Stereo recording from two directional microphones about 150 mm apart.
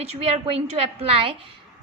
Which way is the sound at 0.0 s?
45° right (ahead or behind).